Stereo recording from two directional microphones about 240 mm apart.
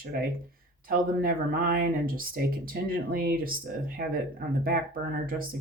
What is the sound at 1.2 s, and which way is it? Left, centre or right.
Speech, right.